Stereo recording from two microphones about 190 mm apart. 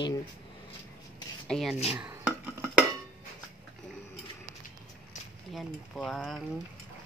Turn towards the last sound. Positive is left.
turn(degrees=0)  # may be behind; listen again after turning